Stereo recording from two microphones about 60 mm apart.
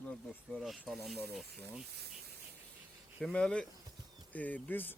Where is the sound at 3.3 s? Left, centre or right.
Centre.